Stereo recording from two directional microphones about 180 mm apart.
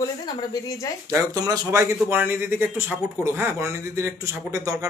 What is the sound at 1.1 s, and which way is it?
Speech, 20° right (ahead or behind).